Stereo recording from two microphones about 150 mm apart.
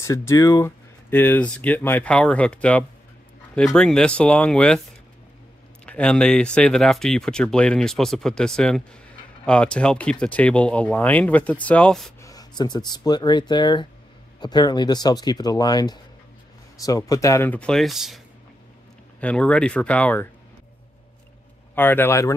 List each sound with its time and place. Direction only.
0.0 s speech: 20° left (ahead or behind)
5.9 s speech: 5° left (ahead or behind)
12.2 s speech: 25° left (ahead or behind)
21.7 s speech: 15° left (ahead or behind)